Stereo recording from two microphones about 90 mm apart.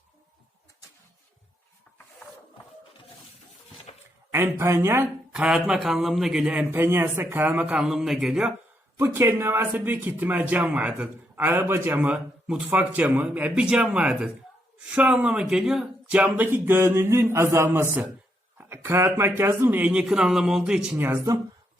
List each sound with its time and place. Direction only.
4.3 s a woman's voice: 30° right (ahead or behind)
5.3 s speech: 10° right (ahead or behind)
6.7 s speech: 25° right (ahead or behind); by 8.5 s 5° right (ahead or behind)
9.0 s speech: 30° right (ahead or behind); by 12.6 s 10° right (ahead or behind)
12.7 s speech: 20° right (ahead or behind)
16.5 s speech: 25° right (ahead or behind)
19.9 s speech: 10° right (ahead or behind)